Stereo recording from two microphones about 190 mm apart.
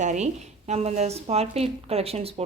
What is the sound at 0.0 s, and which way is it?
A woman's voice, 40° right (ahead or behind).